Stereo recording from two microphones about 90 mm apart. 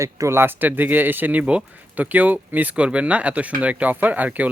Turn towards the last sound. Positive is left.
turn(degrees=-15)  # may be behind; listen again after turning